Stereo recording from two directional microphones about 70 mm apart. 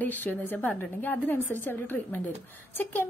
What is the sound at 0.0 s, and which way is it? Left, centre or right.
A woman's voice, left.